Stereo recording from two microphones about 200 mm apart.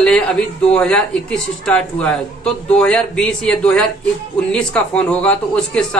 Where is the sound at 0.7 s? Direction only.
5° left (ahead or behind).